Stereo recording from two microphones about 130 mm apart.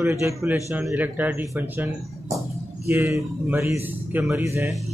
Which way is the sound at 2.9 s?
20° right (ahead or behind).